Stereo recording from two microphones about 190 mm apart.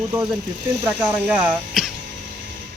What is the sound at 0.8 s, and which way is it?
Speech, 10° right (ahead or behind).